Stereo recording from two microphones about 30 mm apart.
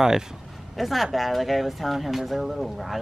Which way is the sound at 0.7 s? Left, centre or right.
Centre.